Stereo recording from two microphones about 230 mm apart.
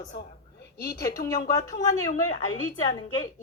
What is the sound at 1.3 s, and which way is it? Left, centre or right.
A woman's voice, centre.